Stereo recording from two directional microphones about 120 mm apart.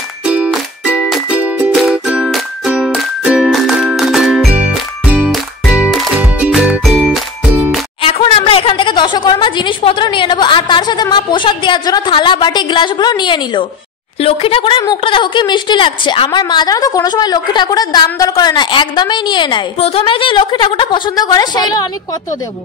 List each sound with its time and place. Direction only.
0.2 s music: 10° right (ahead or behind)
8.0 s a sound: 50° left (ahead or behind)
14.2 s a woman's voice: 50° left (ahead or behind)
19.8 s a woman's voice: 55° left (ahead or behind); by 21.8 s 35° left (ahead or behind)